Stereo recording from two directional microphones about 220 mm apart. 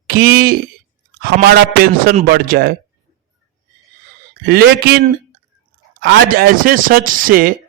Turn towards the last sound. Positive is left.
turn(degrees=-40)  # may be behind; listen again after turning